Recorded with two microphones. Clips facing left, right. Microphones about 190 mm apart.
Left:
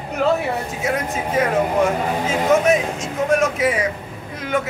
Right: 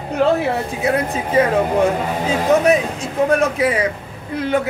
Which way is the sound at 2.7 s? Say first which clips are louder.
Right 2 dB; 35° right (ahead or behind).